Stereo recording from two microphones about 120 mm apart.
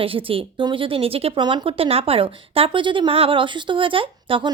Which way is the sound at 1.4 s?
40° right (ahead or behind).